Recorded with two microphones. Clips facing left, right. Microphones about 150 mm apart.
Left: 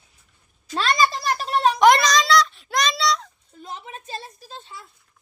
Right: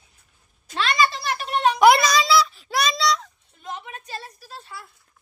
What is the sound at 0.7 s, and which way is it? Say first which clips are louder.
Speech: left 1 dB; 40° left (ahead or behind).